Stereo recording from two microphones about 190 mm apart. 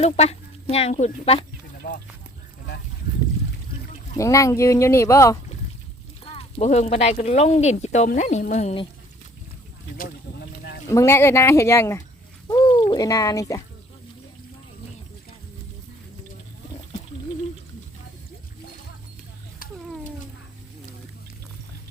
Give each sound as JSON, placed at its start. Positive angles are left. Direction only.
{"t": 0.0, "sound": "speech", "side_deg": 35}
{"t": 4.2, "sound": "speech", "side_deg": 15}
{"t": 6.3, "sound": "speech", "side_deg": 35}
{"t": 10.9, "sound": "speech", "side_deg": 15}